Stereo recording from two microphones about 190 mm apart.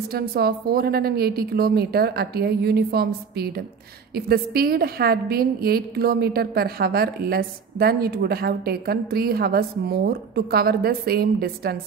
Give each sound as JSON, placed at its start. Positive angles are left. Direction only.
{"t": 0.1, "sound": "a woman's voice", "side_deg": -55}